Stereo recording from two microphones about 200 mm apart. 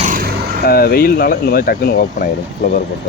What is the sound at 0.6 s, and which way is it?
A man's voice, 50° left (ahead or behind).